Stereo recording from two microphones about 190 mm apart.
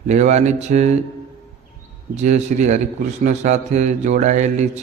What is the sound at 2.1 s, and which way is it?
Mantra, 40° right (ahead or behind).